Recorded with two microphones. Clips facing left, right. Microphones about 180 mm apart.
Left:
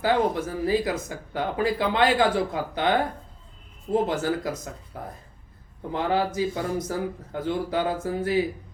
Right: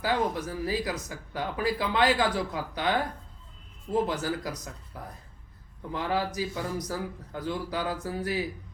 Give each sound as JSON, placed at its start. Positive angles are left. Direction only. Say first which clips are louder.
{"t": 0.0, "sound": "speech", "louder": "left 5 dB", "side_deg": 25}